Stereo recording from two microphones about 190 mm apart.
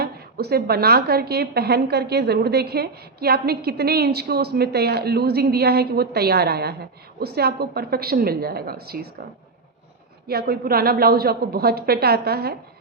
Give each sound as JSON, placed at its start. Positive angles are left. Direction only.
{"t": 0.0, "sound": "a woman's voice", "side_deg": -55}
{"t": 10.2, "sound": "a woman's voice", "side_deg": -55}